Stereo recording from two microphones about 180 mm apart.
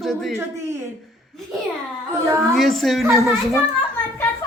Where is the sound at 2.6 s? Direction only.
Centre (ahead or behind).